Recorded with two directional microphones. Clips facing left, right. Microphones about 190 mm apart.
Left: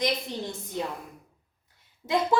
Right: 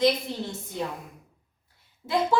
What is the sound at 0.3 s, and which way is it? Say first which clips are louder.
Speech: right 1 dB; 15° left (ahead or behind).